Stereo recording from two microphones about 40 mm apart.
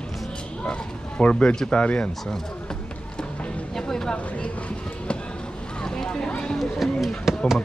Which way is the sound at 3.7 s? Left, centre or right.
Centre.